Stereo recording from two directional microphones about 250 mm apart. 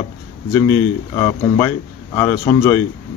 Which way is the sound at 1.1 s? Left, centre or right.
Centre.